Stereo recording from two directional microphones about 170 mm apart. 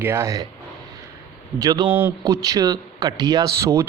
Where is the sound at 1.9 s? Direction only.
10° right (ahead or behind).